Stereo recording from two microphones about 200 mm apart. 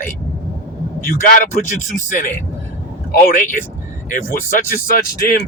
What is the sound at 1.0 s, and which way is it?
Speech, 45° left (ahead or behind).